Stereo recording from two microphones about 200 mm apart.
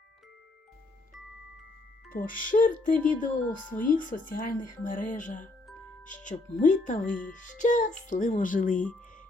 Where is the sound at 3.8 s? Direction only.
40° left (ahead or behind).